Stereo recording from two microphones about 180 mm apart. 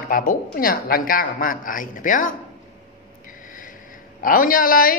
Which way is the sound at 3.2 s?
50° left (ahead or behind).